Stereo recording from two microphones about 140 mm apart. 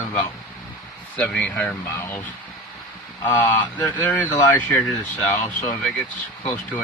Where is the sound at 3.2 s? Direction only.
15° left (ahead or behind).